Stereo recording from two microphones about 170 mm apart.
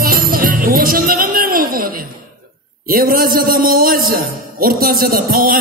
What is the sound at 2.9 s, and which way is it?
A man's voice, 60° right (ahead or behind).